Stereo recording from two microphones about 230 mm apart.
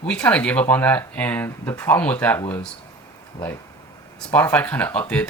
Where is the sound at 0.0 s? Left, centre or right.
Centre.